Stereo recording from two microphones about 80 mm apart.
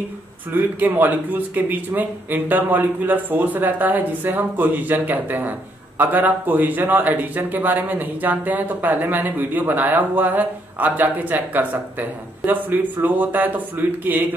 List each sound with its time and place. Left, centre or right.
0.5 s speech: right